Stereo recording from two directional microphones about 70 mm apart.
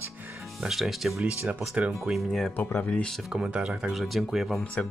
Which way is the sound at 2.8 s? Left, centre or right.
Centre.